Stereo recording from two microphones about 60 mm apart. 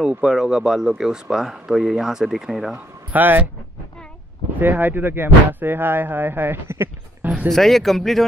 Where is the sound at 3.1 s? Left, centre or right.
Right.